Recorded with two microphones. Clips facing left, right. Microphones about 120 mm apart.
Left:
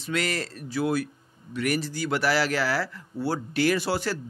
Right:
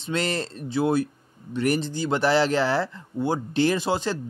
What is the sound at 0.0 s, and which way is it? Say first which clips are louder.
Speech: right 2 dB; 30° right (ahead or behind).